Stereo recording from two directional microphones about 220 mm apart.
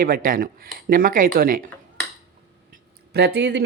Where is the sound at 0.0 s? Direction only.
40° right (ahead or behind).